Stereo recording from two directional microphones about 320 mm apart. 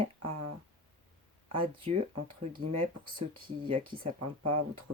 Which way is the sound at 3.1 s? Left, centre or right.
Centre.